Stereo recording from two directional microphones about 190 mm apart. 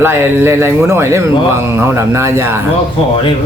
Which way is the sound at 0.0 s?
10° right (ahead or behind).